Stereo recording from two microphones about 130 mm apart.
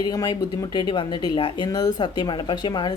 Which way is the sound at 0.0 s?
30° left (ahead or behind).